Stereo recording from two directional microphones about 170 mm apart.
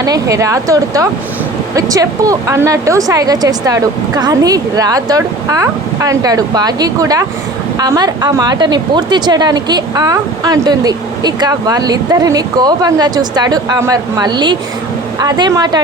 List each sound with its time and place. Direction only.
0.0 s a woman's voice: 20° right (ahead or behind)